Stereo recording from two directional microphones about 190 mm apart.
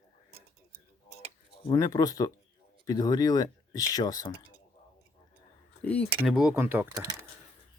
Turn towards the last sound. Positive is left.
turn(degrees=-15)  # may be behind; listen again after turning